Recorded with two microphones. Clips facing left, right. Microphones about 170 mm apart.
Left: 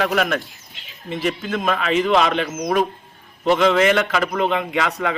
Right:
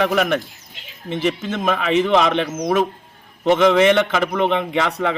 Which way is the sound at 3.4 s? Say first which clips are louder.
Right 2 dB; 20° right (ahead or behind).